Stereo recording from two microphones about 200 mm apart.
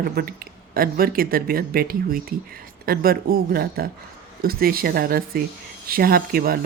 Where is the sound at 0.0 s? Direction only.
50° right (ahead or behind).